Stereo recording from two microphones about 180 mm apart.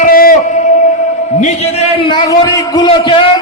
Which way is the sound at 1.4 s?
35° left (ahead or behind).